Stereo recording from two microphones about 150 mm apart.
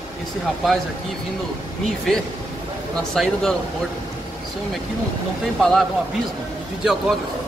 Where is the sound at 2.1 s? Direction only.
5° left (ahead or behind).